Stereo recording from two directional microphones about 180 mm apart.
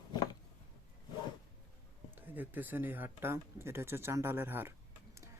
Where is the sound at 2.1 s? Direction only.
10° right (ahead or behind).